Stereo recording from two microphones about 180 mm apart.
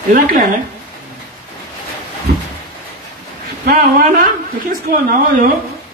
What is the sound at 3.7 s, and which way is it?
A man's voice, 50° right (ahead or behind).